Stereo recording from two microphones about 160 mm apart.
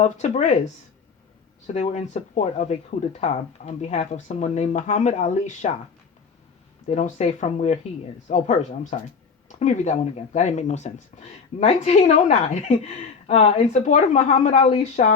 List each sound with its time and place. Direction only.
0.0 s speech: 45° left (ahead or behind)
1.6 s speech: 45° left (ahead or behind)
6.8 s speech: 45° left (ahead or behind)
13.8 s speech: 45° left (ahead or behind)